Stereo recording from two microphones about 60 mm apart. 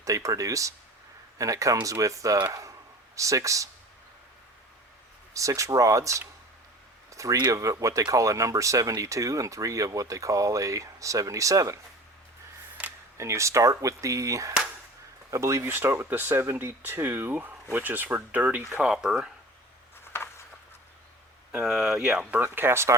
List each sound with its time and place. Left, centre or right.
0.0 s speech: right
5.3 s speech: right
13.1 s speech: right
15.6 s speech: right
18.7 s speech: centre
21.6 s speech: centre
22.5 s speech: right